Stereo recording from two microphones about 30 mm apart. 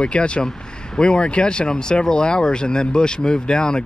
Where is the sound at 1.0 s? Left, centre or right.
Left.